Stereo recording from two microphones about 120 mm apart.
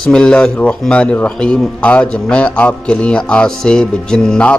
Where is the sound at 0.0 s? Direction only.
5° left (ahead or behind).